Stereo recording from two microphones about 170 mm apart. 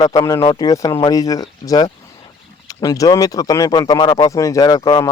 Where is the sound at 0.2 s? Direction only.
20° left (ahead or behind).